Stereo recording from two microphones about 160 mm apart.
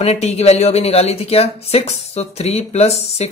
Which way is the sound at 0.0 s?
40° left (ahead or behind).